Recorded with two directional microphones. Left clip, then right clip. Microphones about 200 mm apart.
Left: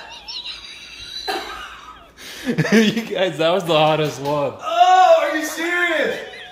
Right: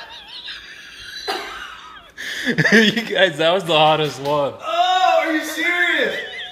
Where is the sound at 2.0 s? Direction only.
Centre (ahead or behind).